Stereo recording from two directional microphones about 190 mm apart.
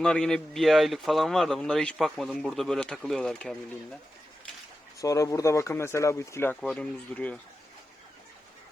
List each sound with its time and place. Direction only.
0.0 s a man's voice: 5° left (ahead or behind)
4.9 s speech: 15° left (ahead or behind)